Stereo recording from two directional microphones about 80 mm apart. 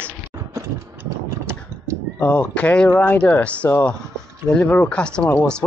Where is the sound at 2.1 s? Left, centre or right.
Centre.